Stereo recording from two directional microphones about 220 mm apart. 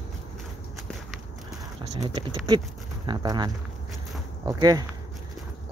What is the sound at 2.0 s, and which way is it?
Speech, 20° right (ahead or behind).